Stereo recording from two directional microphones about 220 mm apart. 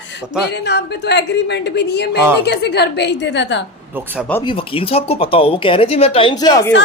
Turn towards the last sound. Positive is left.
turn(degrees=15)  # may be behind; listen again after turning